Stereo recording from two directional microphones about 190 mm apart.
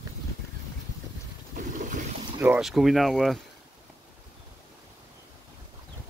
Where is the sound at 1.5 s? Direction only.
40° right (ahead or behind).